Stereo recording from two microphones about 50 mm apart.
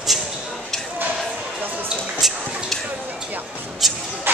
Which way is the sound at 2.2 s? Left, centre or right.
Centre.